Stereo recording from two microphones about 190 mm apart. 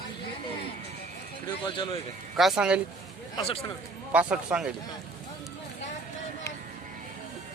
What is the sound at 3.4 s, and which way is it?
Speech, 30° left (ahead or behind).